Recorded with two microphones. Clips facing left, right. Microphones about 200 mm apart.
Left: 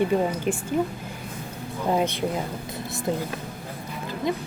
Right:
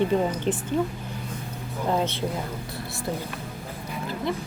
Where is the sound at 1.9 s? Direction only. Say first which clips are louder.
Left 2 dB; 15° left (ahead or behind).